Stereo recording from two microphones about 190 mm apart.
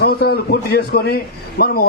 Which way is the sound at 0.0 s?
55° left (ahead or behind).